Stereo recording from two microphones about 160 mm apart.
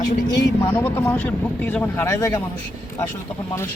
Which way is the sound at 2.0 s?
20° left (ahead or behind).